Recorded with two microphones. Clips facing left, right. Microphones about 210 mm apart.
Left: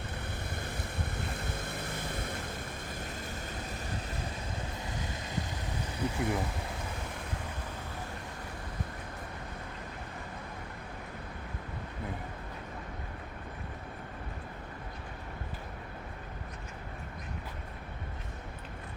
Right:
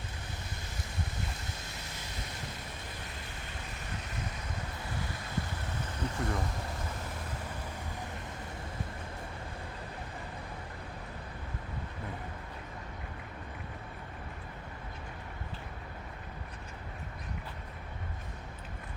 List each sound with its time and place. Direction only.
0.5 s boat: 60° left (ahead or behind)
6.0 s speech: 10° left (ahead or behind)